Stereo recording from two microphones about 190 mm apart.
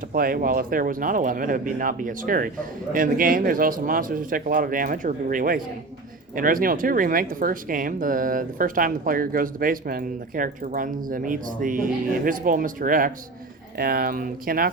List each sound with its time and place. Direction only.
0.1 s speech: 50° right (ahead or behind)